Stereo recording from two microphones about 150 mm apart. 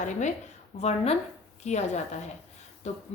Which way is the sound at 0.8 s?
40° left (ahead or behind).